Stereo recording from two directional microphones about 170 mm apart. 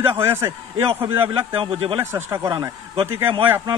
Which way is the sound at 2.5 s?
30° right (ahead or behind).